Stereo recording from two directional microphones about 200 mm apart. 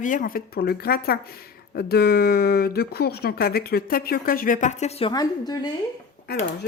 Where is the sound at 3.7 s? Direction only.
50° left (ahead or behind); by 5.7 s 20° left (ahead or behind).